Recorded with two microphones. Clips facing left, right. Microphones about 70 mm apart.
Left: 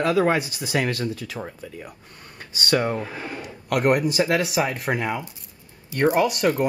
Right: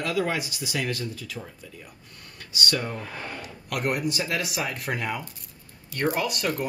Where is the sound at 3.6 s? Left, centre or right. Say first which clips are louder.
Left 7 dB; left.